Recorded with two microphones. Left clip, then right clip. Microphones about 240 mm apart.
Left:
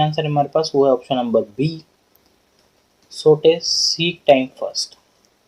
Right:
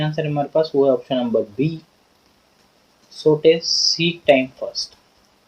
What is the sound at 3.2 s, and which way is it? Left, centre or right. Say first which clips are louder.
Speech: left 1 dB; left.